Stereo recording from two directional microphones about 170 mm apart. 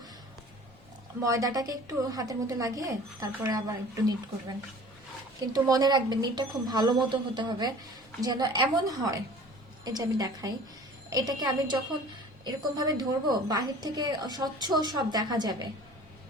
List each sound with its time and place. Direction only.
1.2 s a woman's voice: 20° right (ahead or behind)
5.5 s a woman's voice: 20° right (ahead or behind)